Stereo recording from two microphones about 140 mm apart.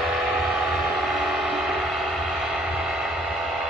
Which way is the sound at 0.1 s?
5° right (ahead or behind).